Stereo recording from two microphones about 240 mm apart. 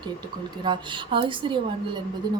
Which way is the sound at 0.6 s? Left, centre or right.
Centre.